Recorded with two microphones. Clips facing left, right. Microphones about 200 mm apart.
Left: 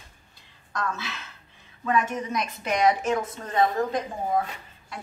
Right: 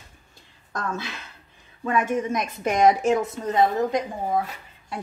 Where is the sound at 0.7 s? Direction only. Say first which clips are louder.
Right 1 dB; 45° right (ahead or behind).